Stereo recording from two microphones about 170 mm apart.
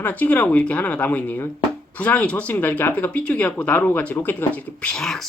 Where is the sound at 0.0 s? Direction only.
10° left (ahead or behind).